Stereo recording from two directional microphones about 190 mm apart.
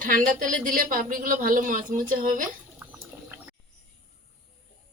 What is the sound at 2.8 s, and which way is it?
Water, 10° right (ahead or behind).